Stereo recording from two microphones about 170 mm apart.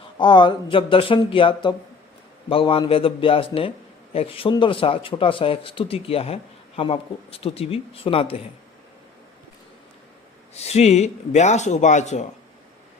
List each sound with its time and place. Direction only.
0.2 s a man's voice: 25° left (ahead or behind)
10.5 s a man's voice: 40° left (ahead or behind)